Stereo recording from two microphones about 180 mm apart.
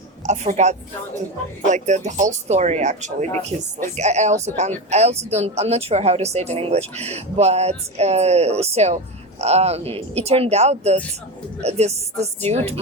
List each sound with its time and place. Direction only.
0.3 s speech: 40° right (ahead or behind)